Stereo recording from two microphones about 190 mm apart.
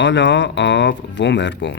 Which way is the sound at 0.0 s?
70° left (ahead or behind).